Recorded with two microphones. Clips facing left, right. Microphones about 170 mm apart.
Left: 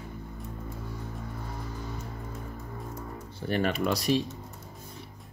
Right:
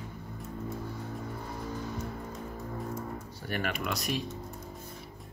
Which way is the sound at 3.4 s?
30° left (ahead or behind).